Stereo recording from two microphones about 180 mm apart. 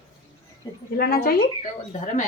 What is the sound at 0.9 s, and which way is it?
Speech, 55° left (ahead or behind).